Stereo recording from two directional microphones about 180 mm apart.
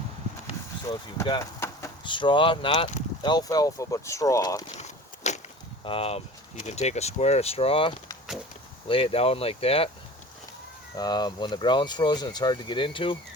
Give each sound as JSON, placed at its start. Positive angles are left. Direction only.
{"t": 0.9, "sound": "speech", "side_deg": 20}
{"t": 2.0, "sound": "speech", "side_deg": 25}
{"t": 4.8, "sound": "walk", "side_deg": 40}
{"t": 5.8, "sound": "speech", "side_deg": 30}
{"t": 10.9, "sound": "speech", "side_deg": 25}